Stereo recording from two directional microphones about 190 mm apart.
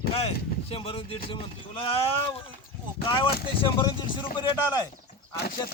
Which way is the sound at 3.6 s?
25° left (ahead or behind).